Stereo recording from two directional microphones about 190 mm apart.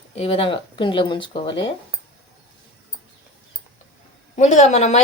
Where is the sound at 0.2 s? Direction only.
30° left (ahead or behind).